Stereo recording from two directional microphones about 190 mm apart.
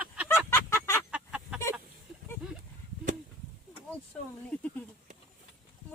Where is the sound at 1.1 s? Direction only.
5° right (ahead or behind).